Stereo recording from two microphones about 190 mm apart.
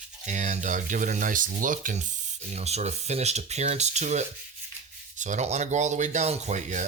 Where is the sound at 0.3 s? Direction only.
40° right (ahead or behind).